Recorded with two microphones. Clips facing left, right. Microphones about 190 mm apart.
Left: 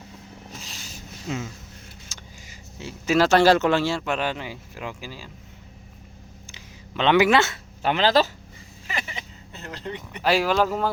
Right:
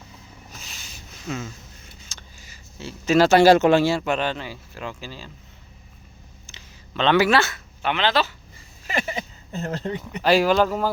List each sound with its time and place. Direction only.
2.0 s vehicle: 15° left (ahead or behind)
3.2 s speech: 5° right (ahead or behind); by 5.3 s 10° left (ahead or behind)
6.5 s a sound: 15° left (ahead or behind)
7.8 s speech: 35° left (ahead or behind)
8.9 s speech: 45° right (ahead or behind)
10.2 s speech: centre (ahead or behind)